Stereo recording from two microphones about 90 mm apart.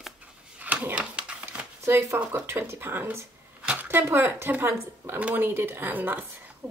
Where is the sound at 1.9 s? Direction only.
30° right (ahead or behind).